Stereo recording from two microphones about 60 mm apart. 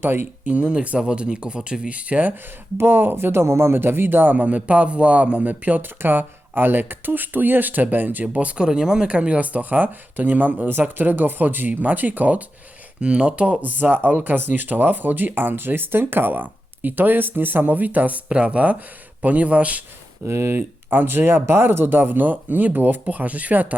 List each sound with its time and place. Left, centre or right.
0.0 s speech: right
0.4 s speech: centre
2.3 s speech: right
20.2 s speech: right